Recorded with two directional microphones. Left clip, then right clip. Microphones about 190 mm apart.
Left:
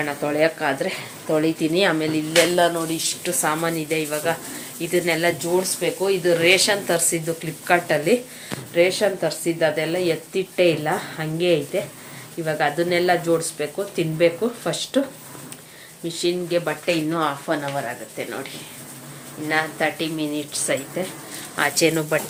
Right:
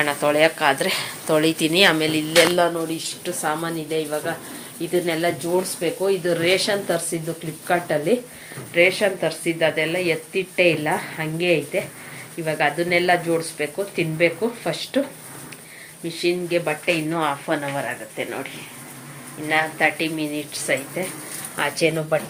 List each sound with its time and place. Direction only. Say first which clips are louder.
0.0 s speech: right 3 dB; centre (ahead or behind)
3.2 s a woman's voice: left 2 dB; 25° left (ahead or behind)
16.0 s speech: right 1 dB; 15° left (ahead or behind); by 18.4 s 5° right (ahead or behind)
19.5 s a woman's voice: right 2 dB; 15° left (ahead or behind)